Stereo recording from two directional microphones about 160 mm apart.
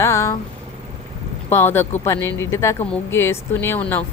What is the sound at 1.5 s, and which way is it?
A woman's voice, 15° left (ahead or behind).